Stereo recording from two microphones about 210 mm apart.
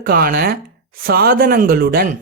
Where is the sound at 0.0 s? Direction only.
45° right (ahead or behind).